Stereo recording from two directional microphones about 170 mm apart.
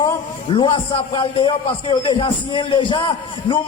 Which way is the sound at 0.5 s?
30° left (ahead or behind).